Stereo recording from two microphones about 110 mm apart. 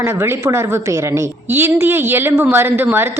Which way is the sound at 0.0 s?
25° right (ahead or behind).